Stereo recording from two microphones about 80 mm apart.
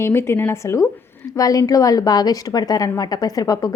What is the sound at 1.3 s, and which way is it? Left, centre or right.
A woman's voice, left.